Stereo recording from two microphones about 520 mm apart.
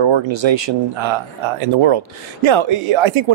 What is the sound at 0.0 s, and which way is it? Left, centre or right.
Speech, right.